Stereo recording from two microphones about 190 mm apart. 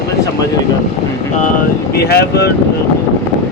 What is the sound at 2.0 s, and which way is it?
Speech, 55° left (ahead or behind).